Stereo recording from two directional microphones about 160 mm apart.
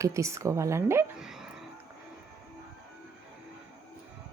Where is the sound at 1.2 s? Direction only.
5° right (ahead or behind).